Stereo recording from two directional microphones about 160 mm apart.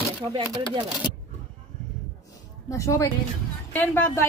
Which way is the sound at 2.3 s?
20° left (ahead or behind).